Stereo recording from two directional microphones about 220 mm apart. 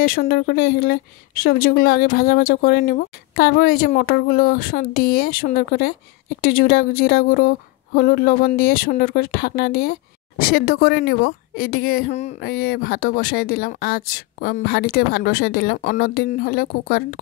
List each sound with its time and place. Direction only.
0.0 s a woman's voice: 40° left (ahead or behind)